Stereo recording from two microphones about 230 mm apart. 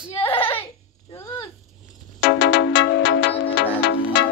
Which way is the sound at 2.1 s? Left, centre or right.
Left.